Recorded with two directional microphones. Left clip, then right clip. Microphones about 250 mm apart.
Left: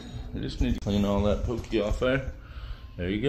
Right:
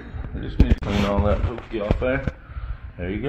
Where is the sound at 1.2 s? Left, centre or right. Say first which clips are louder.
Right 4 dB; left.